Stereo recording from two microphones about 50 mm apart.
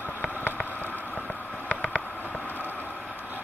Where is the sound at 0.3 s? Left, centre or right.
Left.